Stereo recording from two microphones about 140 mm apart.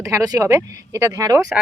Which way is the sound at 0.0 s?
25° right (ahead or behind).